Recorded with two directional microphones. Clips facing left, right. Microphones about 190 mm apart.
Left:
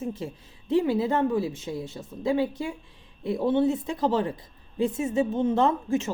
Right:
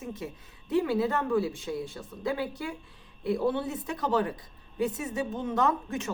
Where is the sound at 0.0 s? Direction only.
30° left (ahead or behind).